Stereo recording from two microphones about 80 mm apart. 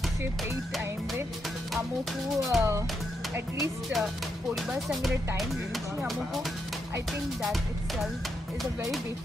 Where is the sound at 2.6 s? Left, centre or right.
Right.